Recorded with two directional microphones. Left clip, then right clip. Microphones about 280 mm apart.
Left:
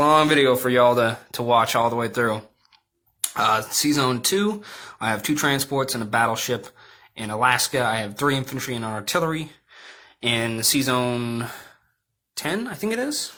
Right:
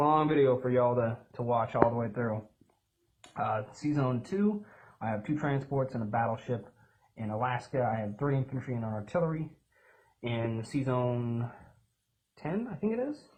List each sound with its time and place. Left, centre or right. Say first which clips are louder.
0.0 s speech: left 9 dB; left
12.4 s speech: left 9 dB; left